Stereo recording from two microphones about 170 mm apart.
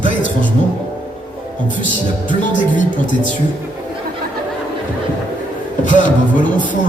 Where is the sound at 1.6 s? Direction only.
50° left (ahead or behind).